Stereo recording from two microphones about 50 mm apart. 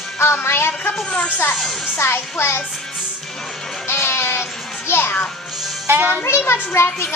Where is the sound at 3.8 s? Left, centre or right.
Left.